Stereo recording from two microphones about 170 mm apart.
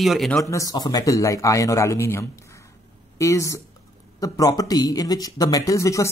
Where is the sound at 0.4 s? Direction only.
20° left (ahead or behind).